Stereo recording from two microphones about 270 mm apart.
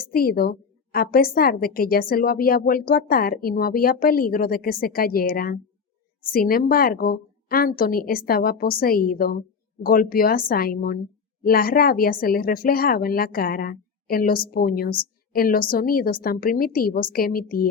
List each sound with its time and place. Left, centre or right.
0.0 s a woman's voice: left